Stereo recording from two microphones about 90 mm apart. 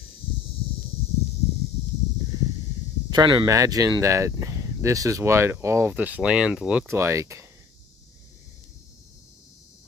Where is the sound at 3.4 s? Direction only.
40° right (ahead or behind).